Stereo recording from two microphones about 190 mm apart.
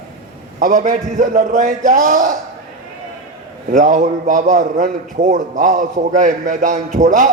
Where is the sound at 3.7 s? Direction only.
40° right (ahead or behind).